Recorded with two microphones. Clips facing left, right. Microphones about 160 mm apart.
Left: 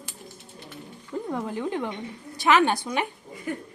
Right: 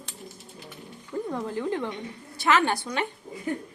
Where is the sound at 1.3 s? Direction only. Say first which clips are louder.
Left 1 dB; 15° left (ahead or behind).